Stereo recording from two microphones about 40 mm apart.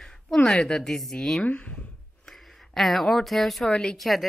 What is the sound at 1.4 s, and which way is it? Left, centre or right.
Speech, left.